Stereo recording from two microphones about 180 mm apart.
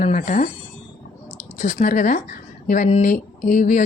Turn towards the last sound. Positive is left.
turn(degrees=45)  # may be behind; listen again after turning